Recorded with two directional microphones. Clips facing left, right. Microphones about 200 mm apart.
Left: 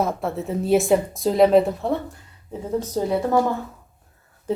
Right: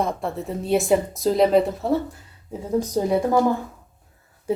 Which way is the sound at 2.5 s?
15° right (ahead or behind).